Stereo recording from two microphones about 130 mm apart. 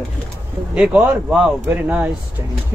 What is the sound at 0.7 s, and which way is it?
A man's voice, 10° right (ahead or behind).